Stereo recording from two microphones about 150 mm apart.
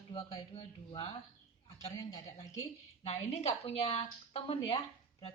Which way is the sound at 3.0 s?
45° left (ahead or behind).